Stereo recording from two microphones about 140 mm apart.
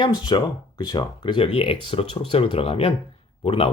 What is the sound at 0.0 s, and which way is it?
Speech, 30° left (ahead or behind).